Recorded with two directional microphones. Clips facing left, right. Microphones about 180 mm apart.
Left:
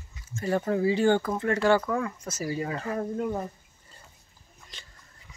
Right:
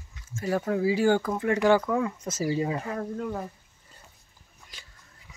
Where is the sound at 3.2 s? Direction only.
15° left (ahead or behind).